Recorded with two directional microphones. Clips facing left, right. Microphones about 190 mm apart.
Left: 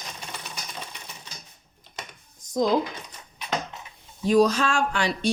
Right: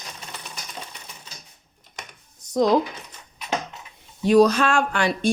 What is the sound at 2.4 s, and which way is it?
Dishes, 70° right (ahead or behind).